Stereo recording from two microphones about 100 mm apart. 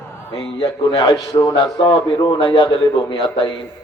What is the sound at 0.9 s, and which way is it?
Speech, 40° left (ahead or behind).